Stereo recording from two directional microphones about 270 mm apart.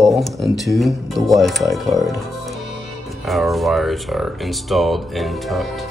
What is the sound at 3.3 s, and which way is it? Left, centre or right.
Speech, centre.